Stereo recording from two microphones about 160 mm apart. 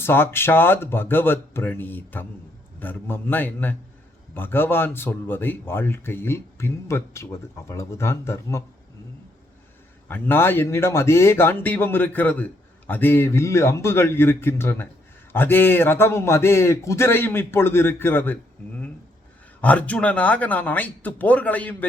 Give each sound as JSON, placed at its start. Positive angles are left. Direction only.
{"t": 0.0, "sound": "a man's voice", "side_deg": 15}
{"t": 10.1, "sound": "a man's voice", "side_deg": 15}
{"t": 19.6, "sound": "a man's voice", "side_deg": 10}